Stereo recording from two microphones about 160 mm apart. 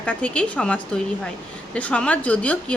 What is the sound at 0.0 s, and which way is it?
A woman's voice, 10° left (ahead or behind).